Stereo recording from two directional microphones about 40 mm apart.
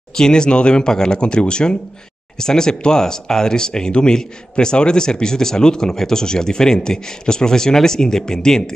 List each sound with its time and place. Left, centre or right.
0.1 s speech: centre